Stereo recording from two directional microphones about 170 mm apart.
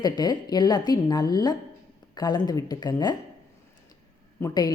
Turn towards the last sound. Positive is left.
turn(degrees=25)  # may be behind; listen again after turning